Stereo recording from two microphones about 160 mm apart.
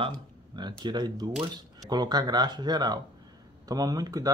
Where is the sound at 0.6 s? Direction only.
25° right (ahead or behind).